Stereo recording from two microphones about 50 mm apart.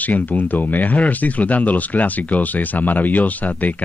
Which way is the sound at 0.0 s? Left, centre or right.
Left.